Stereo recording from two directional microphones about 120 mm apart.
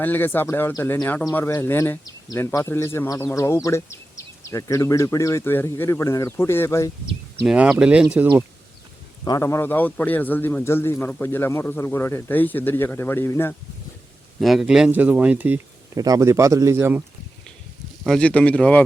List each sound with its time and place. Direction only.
0.0 s a man's voice: 15° left (ahead or behind)
7.4 s speech: 5° right (ahead or behind)
9.2 s a man's voice: 30° left (ahead or behind)
14.4 s speech: centre (ahead or behind)
16.0 s speech: 30° right (ahead or behind)
18.0 s a man's voice: 5° left (ahead or behind)